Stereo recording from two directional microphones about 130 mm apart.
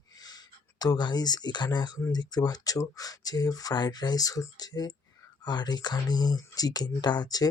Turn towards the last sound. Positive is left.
turn(degrees=30)  # may be behind; listen again after turning